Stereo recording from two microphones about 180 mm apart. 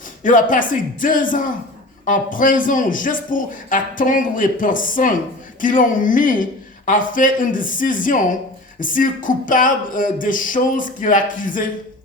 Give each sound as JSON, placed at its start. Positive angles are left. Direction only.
{"t": 0.2, "sound": "a man's voice", "side_deg": 50}